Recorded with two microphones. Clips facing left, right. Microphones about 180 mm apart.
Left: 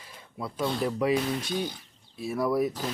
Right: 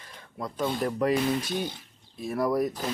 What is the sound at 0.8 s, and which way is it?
Speech, centre (ahead or behind).